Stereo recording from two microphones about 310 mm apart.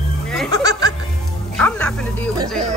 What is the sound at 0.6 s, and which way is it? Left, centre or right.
Music, centre.